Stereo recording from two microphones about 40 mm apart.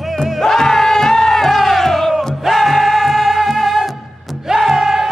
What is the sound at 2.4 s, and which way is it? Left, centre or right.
Music, centre.